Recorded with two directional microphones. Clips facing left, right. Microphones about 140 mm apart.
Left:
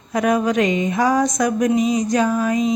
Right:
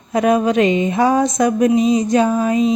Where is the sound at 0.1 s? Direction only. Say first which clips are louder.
Right 3 dB; 25° right (ahead or behind).